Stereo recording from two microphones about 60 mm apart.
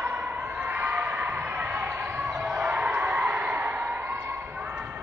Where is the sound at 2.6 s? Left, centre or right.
Right.